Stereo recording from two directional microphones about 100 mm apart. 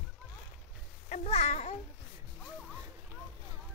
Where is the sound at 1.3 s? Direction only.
90° left.